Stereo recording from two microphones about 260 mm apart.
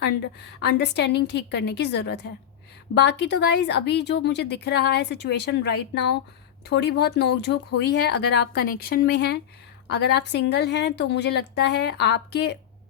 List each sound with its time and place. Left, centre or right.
0.6 s a woman's voice: left